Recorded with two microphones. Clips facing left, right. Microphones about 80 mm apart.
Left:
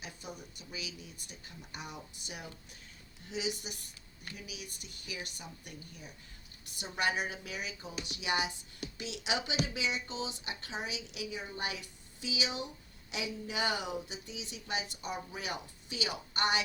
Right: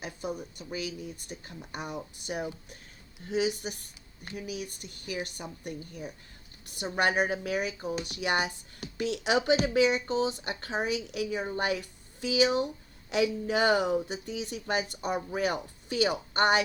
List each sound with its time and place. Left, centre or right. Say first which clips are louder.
0.0 s speech: right 10 dB; right